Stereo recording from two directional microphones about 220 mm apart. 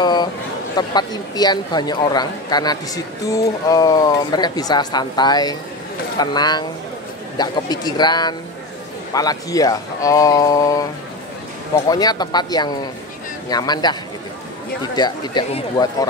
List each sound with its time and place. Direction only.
0.0 s a sound: 20° left (ahead or behind)
0.7 s speech: 20° left (ahead or behind)
15.0 s speech: 20° left (ahead or behind)